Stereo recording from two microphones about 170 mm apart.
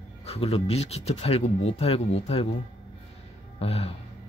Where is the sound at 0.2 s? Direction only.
35° left (ahead or behind).